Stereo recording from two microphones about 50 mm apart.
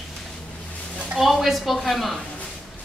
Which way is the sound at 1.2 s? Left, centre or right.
Centre.